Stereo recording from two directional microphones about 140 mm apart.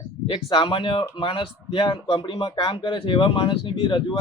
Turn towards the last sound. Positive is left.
turn(degrees=35)  # may be behind; listen again after turning